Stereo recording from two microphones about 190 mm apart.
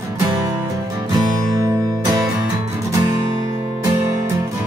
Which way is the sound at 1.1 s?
20° right (ahead or behind).